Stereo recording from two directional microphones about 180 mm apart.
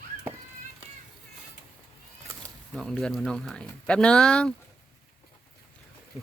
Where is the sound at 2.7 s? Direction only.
5° left (ahead or behind).